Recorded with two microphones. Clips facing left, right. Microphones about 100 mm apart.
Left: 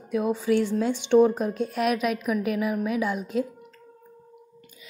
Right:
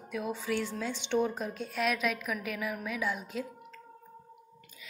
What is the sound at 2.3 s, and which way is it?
A woman's voice, 40° left (ahead or behind).